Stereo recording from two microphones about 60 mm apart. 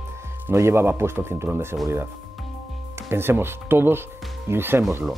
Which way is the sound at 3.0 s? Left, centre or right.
Right.